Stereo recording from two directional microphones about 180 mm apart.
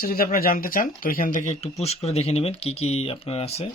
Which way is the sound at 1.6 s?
35° left (ahead or behind).